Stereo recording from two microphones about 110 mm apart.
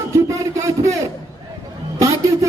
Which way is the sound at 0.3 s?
30° right (ahead or behind).